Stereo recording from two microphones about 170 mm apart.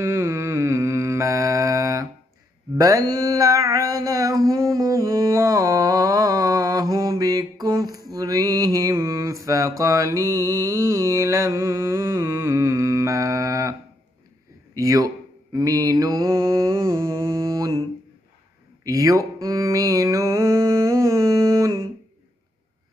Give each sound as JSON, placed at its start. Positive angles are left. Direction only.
{"t": 0.0, "sound": "mantra", "side_deg": -15}
{"t": 14.7, "sound": "a man's voice", "side_deg": -20}
{"t": 15.5, "sound": "mantra", "side_deg": -20}
{"t": 18.9, "sound": "a sound", "side_deg": -20}
{"t": 19.4, "sound": "mantra", "side_deg": -20}